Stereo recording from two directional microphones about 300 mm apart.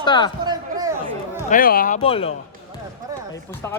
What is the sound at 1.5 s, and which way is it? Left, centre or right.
Speech, left.